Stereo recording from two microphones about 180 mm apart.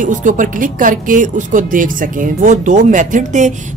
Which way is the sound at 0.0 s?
45° right (ahead or behind).